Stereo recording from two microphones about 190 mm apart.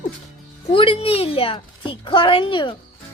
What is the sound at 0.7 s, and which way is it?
A woman's voice, 30° left (ahead or behind).